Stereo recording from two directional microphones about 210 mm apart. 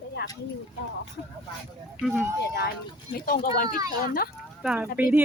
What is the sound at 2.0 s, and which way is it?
Speech, 5° right (ahead or behind).